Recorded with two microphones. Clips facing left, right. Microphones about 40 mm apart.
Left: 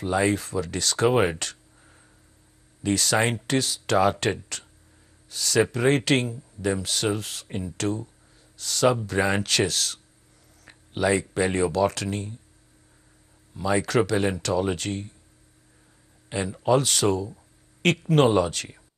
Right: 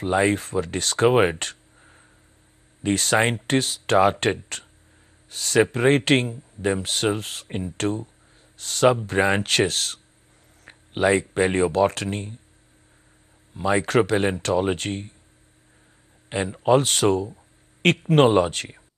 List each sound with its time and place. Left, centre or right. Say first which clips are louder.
0.0 s speech: right 3 dB; right
1.4 s a sound: right 3 dB; right
2.8 s speech: right 2 dB; right
13.5 s speech: right 2 dB; right
16.3 s speech: right 3 dB; right